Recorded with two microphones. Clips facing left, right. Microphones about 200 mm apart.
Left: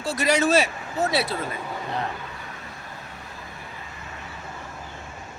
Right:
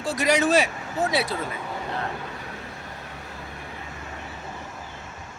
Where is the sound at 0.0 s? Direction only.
15° right (ahead or behind).